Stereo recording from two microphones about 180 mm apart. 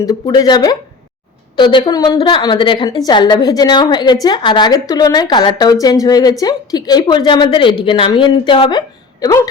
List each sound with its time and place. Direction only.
0.0 s a woman's voice: 20° left (ahead or behind)